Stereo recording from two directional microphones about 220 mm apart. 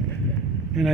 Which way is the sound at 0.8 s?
Centre (ahead or behind).